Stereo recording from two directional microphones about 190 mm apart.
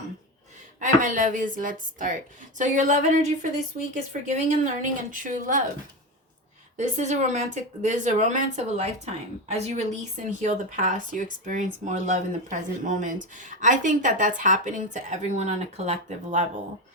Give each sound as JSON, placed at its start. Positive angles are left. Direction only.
{"t": 0.8, "sound": "a woman's voice", "side_deg": -45}
{"t": 6.7, "sound": "speech", "side_deg": -40}